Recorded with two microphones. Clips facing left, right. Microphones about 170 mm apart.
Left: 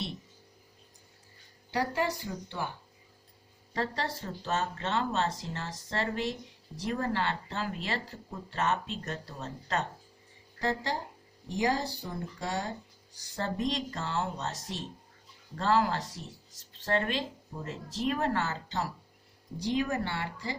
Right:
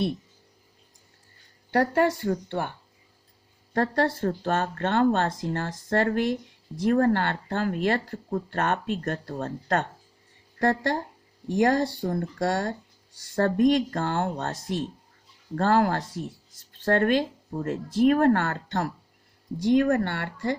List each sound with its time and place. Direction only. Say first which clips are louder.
1.7 s speech: right 8 dB; 55° right (ahead or behind)
3.8 s speech: right 9 dB; 55° right (ahead or behind)